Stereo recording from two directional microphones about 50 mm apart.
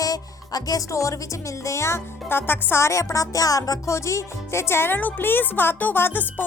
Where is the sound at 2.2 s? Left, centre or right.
Left.